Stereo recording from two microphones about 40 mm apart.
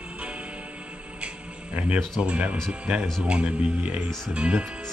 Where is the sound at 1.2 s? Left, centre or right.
Right.